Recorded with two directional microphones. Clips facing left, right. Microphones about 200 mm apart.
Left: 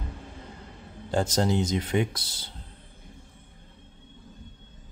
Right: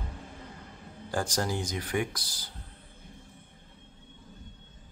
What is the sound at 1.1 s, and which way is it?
Speech, 25° left (ahead or behind).